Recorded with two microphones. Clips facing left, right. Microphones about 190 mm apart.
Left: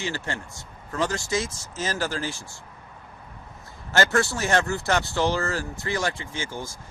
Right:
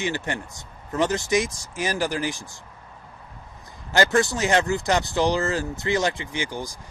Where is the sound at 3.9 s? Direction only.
15° right (ahead or behind).